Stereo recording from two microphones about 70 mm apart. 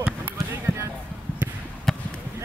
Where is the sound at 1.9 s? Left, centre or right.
Centre.